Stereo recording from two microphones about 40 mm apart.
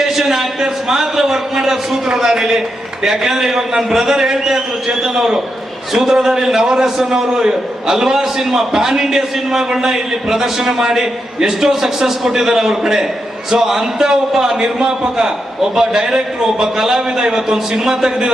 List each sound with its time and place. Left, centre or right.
0.0 s a man's voice: centre